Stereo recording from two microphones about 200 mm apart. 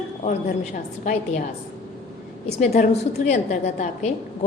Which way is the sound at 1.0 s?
35° left (ahead or behind).